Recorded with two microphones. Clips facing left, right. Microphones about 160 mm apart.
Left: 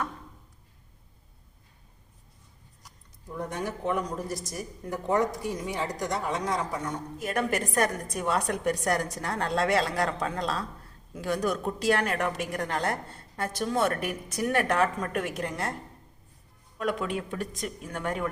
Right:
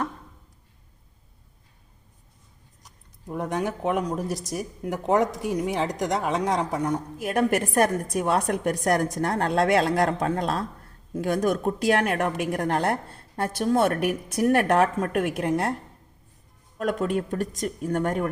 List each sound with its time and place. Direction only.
3.3 s a woman's voice: 90° right; by 15.7 s 60° right (ahead or behind)
16.7 s speech: 45° right (ahead or behind)